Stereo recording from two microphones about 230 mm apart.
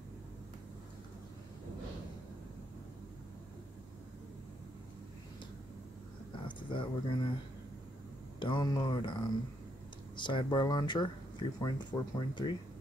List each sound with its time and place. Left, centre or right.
6.4 s speech: left
8.4 s speech: centre